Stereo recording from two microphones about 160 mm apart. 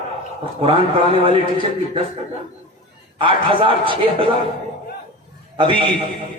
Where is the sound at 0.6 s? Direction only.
35° right (ahead or behind).